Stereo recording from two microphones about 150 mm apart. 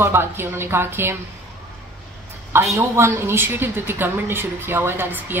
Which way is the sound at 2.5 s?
15° right (ahead or behind).